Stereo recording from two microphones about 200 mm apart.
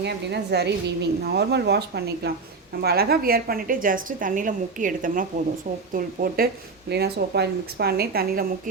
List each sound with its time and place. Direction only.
0.0 s a woman's voice: 55° right (ahead or behind)